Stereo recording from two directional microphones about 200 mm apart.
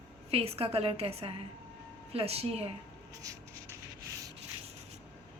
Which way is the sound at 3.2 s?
15° right (ahead or behind).